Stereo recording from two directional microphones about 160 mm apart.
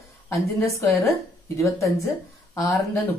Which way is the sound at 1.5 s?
20° left (ahead or behind).